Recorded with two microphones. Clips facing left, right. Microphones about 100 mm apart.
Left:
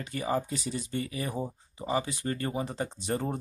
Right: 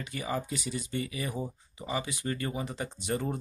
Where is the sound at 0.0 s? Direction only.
40° left (ahead or behind).